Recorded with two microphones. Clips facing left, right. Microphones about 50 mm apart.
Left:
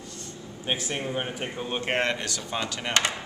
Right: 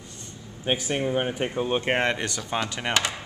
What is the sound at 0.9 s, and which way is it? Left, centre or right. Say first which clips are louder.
Speech: right 5 dB; centre.